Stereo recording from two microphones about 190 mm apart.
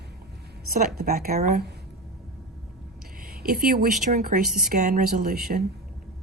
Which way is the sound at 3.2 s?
50° right (ahead or behind).